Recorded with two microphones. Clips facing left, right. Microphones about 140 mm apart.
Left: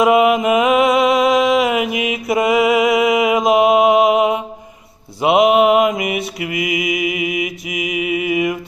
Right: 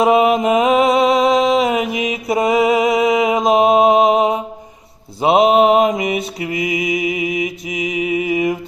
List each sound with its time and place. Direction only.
0.0 s mantra: 30° right (ahead or behind)